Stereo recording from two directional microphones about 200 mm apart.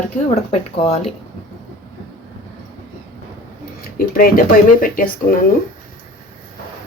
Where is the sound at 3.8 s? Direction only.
45° left (ahead or behind).